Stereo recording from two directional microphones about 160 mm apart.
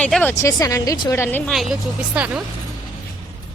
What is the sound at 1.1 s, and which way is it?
Speech, 15° left (ahead or behind).